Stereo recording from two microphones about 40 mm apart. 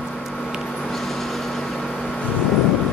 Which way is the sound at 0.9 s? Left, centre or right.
Centre.